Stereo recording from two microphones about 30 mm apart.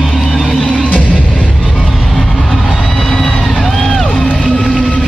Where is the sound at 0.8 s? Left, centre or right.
Left.